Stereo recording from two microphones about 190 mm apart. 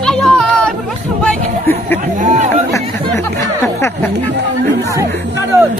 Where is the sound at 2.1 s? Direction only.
40° right (ahead or behind).